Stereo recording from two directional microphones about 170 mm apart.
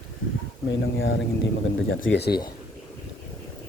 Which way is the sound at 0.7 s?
90° left.